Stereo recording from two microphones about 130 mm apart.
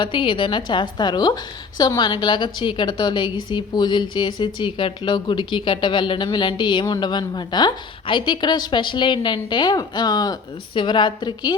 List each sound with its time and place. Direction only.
0.0 s a woman's voice: 40° left (ahead or behind)